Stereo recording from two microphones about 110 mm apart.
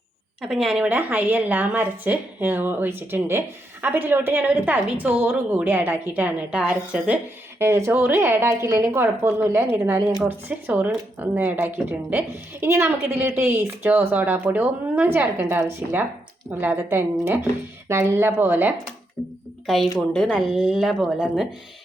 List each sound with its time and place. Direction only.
0.4 s speech: 5° right (ahead or behind)
0.9 s a woman's voice: 15° right (ahead or behind)
7.6 s a woman's voice: 25° right (ahead or behind)
19.6 s speech: centre (ahead or behind)